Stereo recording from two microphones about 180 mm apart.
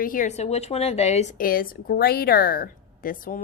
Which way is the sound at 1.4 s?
55° left (ahead or behind).